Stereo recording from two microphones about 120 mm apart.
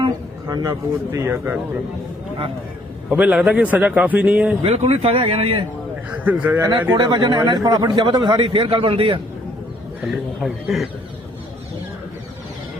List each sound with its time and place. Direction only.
0.4 s speech: 30° right (ahead or behind)
3.1 s a man's voice: 10° right (ahead or behind)
4.6 s a man's voice: 55° right (ahead or behind)
6.1 s a man's voice: 15° right (ahead or behind)
6.9 s a man's voice: 40° right (ahead or behind)
10.1 s a man's voice: centre (ahead or behind)